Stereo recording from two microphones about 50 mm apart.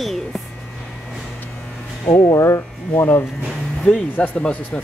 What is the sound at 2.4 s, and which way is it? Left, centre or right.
Speech, left.